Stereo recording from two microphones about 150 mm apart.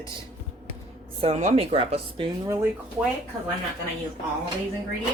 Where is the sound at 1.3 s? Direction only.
45° right (ahead or behind).